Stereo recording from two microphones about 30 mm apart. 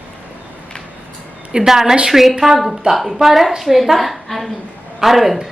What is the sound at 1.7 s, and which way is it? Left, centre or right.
A woman's voice, centre.